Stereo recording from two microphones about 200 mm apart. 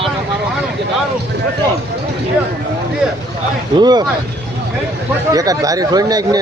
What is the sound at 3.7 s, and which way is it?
Speech, 20° right (ahead or behind).